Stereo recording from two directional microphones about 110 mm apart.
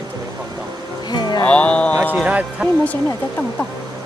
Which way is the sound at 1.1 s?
40° left (ahead or behind).